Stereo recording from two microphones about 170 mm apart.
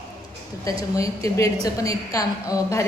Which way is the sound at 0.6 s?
20° left (ahead or behind).